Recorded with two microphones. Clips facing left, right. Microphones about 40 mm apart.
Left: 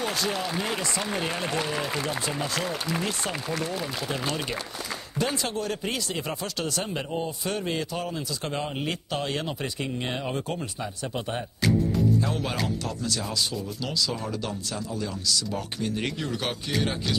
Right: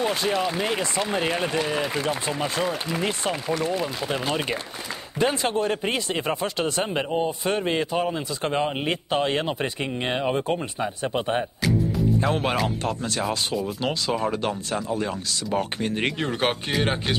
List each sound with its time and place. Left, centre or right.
0.0 s speech: right